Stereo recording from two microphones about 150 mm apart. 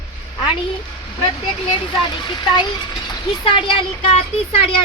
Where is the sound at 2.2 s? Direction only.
30° left (ahead or behind).